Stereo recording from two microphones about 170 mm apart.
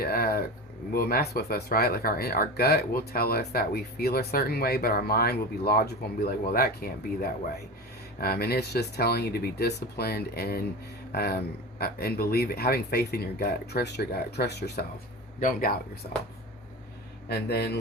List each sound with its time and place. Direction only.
0.0 s speech: 65° left (ahead or behind)
8.2 s speech: 65° left (ahead or behind)
15.4 s speech: 55° left (ahead or behind)
17.2 s speech: 70° left (ahead or behind)